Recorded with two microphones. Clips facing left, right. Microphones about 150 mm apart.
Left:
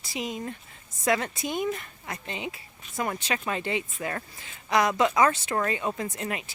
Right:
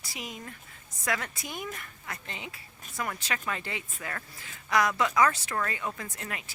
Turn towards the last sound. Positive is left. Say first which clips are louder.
# left 7 dB
turn(degrees=20)  # may be behind; listen again after turning